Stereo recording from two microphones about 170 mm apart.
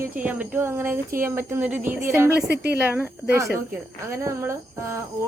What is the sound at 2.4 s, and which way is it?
Speech, 75° right (ahead or behind).